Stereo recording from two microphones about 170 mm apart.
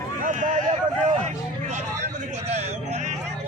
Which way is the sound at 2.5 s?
40° right (ahead or behind).